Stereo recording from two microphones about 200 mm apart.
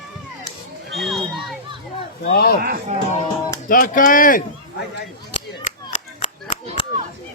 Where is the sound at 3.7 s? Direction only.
45° left (ahead or behind).